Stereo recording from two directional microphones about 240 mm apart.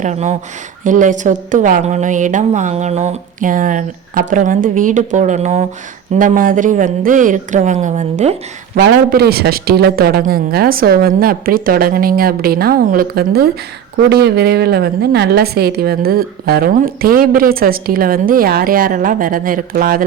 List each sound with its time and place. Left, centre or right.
0.0 s a woman's voice: right
8.7 s a woman's voice: right